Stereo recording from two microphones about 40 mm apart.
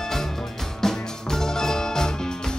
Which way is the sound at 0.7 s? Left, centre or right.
Centre.